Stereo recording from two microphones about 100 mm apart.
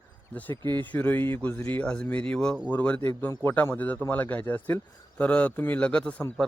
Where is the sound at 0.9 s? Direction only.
20° left (ahead or behind).